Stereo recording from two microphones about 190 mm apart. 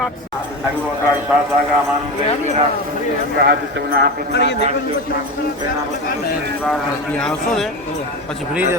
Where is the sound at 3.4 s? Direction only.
55° right (ahead or behind).